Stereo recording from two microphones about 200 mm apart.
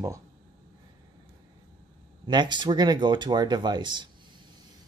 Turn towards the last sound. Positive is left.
turn(degrees=-20)  # may be behind; listen again after turning